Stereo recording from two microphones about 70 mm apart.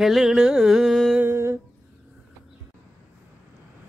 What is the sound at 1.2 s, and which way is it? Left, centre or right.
Humming, right.